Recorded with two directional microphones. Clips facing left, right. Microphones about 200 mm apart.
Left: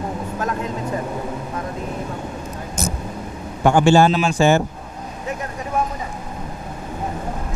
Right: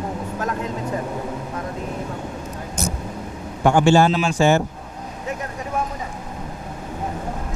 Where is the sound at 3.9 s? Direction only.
10° left (ahead or behind).